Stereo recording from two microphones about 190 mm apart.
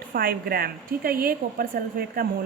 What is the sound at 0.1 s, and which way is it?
A woman's voice, 50° right (ahead or behind).